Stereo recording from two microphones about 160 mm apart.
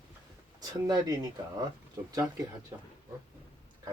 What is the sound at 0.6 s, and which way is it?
Speech, 25° right (ahead or behind).